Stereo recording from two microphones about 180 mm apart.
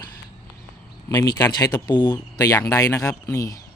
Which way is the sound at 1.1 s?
20° left (ahead or behind).